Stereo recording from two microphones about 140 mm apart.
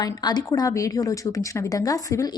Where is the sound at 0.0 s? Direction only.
30° left (ahead or behind).